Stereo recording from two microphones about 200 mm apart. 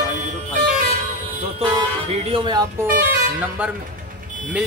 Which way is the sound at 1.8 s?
25° right (ahead or behind).